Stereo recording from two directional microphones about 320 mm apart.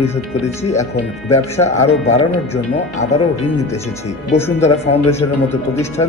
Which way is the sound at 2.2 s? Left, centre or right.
Left.